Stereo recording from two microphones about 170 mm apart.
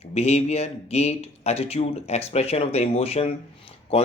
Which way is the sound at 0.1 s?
40° left (ahead or behind).